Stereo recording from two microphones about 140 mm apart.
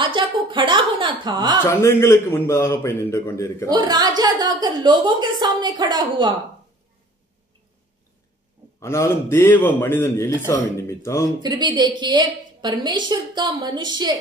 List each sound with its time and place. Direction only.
0.0 s a sound: 35° right (ahead or behind)
1.6 s a man's voice: 20° left (ahead or behind)
3.7 s a woman's voice: 30° right (ahead or behind)
8.7 s a man's voice: 20° left (ahead or behind)
11.4 s a woman's voice: 30° right (ahead or behind)